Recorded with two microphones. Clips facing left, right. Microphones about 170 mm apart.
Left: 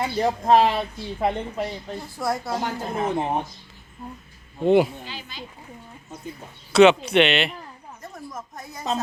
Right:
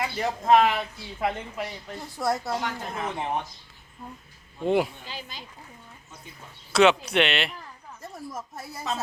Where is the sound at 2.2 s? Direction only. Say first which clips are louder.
Even; centre (ahead or behind).